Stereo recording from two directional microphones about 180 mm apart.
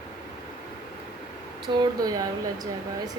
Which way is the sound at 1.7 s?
20° right (ahead or behind).